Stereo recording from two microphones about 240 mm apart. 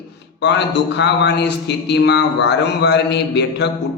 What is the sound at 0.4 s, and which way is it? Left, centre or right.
A man's voice, left.